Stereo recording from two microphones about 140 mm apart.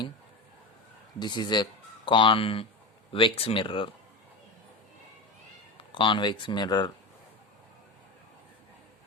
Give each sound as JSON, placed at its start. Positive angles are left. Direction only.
{"t": 1.2, "sound": "speech", "side_deg": 30}
{"t": 5.7, "sound": "speech", "side_deg": 35}